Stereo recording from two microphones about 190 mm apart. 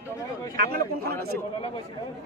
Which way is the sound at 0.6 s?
55° right (ahead or behind).